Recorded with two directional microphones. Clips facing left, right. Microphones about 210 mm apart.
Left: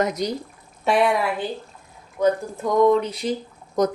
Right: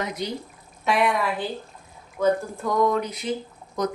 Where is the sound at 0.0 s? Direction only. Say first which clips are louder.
Left 6 dB; 40° left (ahead or behind).